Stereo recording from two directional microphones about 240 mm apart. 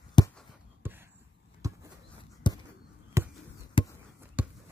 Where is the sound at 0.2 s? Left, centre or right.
Centre.